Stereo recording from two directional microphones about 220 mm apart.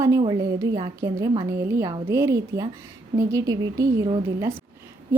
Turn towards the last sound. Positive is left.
turn(degrees=-15)  # may be behind; listen again after turning